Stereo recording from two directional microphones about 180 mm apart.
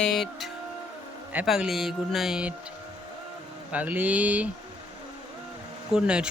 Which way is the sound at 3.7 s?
10° right (ahead or behind).